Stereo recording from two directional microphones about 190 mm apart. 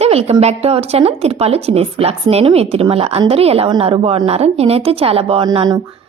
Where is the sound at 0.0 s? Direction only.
35° right (ahead or behind).